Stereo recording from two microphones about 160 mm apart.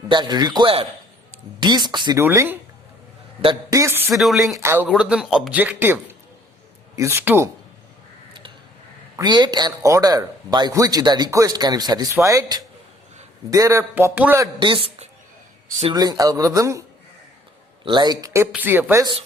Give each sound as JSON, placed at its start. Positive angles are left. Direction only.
{"t": 0.1, "sound": "speech", "side_deg": -25}
{"t": 2.1, "sound": "a man's voice", "side_deg": -15}
{"t": 3.4, "sound": "speech", "side_deg": -25}
{"t": 4.1, "sound": "speech", "side_deg": 0}
{"t": 4.5, "sound": "a man's voice", "side_deg": -15}
{"t": 4.9, "sound": "a man's voice", "side_deg": -5}
{"t": 8.3, "sound": "a sound", "side_deg": -30}
{"t": 9.1, "sound": "speech", "side_deg": -25}
{"t": 14.6, "sound": "a woman's voice", "side_deg": -30}
{"t": 17.8, "sound": "speech", "side_deg": -25}
{"t": 18.5, "sound": "a man's voice", "side_deg": -10}